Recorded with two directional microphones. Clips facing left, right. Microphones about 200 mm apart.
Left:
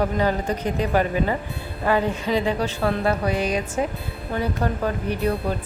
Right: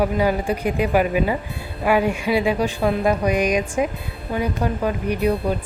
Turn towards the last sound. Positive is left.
turn(degrees=-15)  # may be behind; listen again after turning